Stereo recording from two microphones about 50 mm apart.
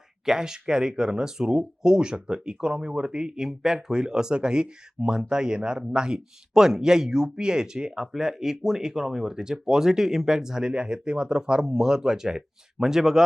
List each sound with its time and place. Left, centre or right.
0.3 s speech: centre